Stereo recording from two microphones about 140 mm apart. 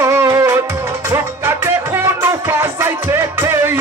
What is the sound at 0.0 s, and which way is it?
Music, 20° right (ahead or behind).